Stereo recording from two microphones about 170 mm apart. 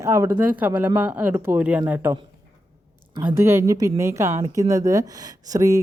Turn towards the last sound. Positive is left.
turn(degrees=-20)  # may be behind; listen again after turning